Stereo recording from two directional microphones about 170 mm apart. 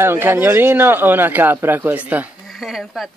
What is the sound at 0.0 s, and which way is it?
A man's voice, 15° right (ahead or behind).